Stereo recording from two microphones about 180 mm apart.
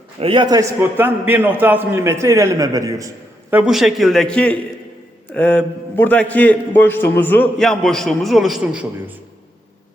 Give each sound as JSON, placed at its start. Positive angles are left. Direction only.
{"t": 0.2, "sound": "a man's voice", "side_deg": -25}
{"t": 3.5, "sound": "a man's voice", "side_deg": -5}